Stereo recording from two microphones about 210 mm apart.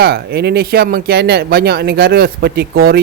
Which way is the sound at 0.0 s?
50° right (ahead or behind).